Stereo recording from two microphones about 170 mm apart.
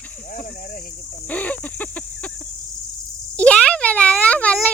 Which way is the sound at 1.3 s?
10° left (ahead or behind).